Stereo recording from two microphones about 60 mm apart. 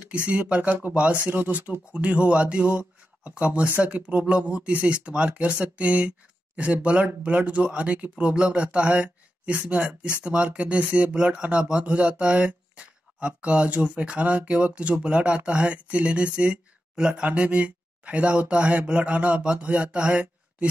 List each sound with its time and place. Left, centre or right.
0.5 s speech: centre